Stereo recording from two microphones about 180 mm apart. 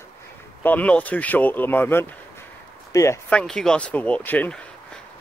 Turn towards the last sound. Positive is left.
turn(degrees=10)  # may be behind; listen again after turning